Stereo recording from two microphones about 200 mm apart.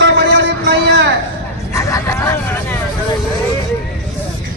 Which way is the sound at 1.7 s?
15° left (ahead or behind).